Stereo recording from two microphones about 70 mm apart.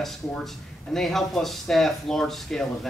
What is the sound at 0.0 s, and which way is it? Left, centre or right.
Speech, centre.